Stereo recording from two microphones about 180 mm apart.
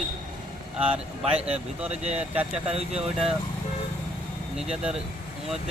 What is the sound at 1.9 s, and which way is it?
Speech, 35° right (ahead or behind).